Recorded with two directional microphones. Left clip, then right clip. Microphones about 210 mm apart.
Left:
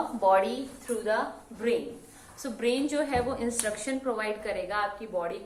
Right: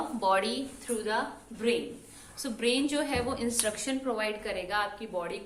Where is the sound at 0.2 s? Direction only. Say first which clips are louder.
Left 4 dB; 25° right (ahead or behind).